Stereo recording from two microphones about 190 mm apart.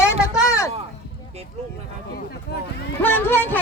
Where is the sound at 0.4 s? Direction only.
15° left (ahead or behind).